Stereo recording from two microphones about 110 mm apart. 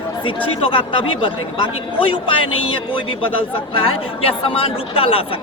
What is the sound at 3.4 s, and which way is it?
A woman's voice, 55° left (ahead or behind).